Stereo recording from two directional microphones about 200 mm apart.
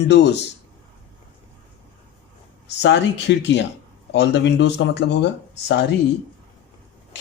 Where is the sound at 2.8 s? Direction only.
60° left (ahead or behind).